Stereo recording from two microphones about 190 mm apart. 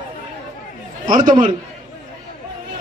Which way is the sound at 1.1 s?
45° right (ahead or behind).